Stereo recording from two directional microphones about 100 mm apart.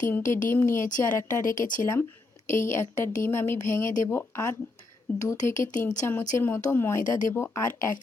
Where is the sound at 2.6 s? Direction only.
25° left (ahead or behind).